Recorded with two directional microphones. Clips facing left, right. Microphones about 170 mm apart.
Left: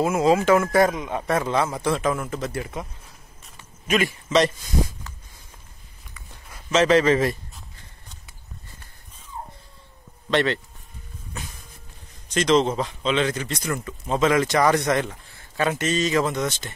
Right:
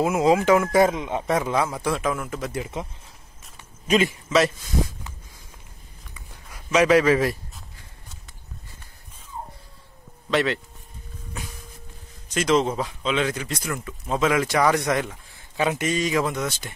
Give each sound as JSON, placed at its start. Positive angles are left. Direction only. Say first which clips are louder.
{"t": 0.0, "sound": "speech", "louder": "even", "side_deg": -15}
{"t": 3.8, "sound": "a man's voice", "louder": "right 2 dB", "side_deg": -30}
{"t": 6.1, "sound": "a sound", "louder": "left 1 dB", "side_deg": -10}
{"t": 10.3, "sound": "speech", "louder": "left 1 dB", "side_deg": -5}
{"t": 12.4, "sound": "speech", "louder": "left 2 dB", "side_deg": -10}